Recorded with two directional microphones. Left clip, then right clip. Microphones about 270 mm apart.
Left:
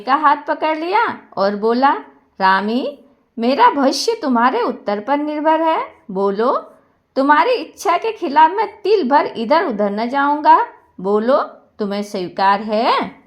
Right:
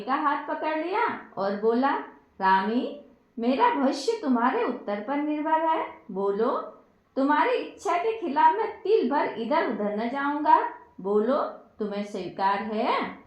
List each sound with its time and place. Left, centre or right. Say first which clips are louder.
0.0 s a woman's voice: left 12 dB; left